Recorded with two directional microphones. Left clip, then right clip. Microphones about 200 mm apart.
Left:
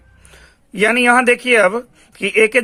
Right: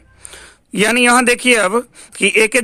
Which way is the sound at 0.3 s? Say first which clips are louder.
Right 7 dB; 40° right (ahead or behind).